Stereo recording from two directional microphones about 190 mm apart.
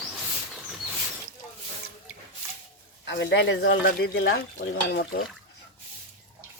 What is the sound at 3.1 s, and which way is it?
Speech, 70° left (ahead or behind).